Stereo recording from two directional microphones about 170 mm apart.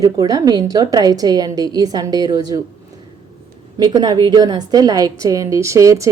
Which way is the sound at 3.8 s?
25° right (ahead or behind).